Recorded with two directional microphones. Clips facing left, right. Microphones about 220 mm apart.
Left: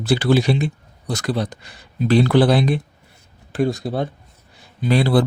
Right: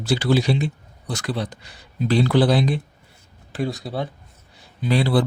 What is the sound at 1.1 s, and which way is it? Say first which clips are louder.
Speech: left 4 dB; 40° left (ahead or behind).